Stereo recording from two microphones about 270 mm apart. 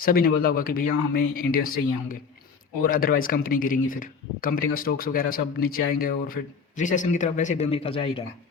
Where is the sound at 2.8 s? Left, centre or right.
Left.